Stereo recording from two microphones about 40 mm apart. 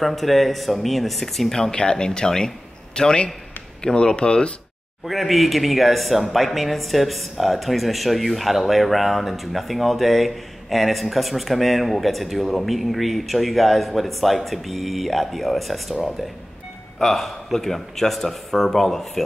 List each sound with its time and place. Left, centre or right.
0.0 s speech: centre
1.6 s a man's voice: centre
5.0 s a man's voice: centre